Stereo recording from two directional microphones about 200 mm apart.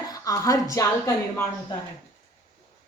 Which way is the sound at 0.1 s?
15° left (ahead or behind).